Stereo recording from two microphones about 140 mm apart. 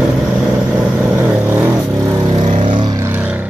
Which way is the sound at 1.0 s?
15° right (ahead or behind).